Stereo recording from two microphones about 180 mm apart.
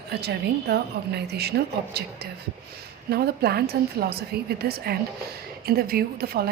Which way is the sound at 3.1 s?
60° right (ahead or behind).